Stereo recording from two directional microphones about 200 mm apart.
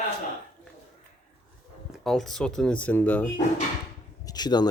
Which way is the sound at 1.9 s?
Centre (ahead or behind).